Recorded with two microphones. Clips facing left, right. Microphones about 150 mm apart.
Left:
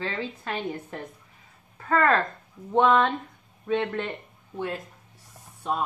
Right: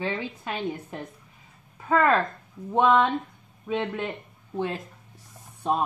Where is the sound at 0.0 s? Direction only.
15° right (ahead or behind).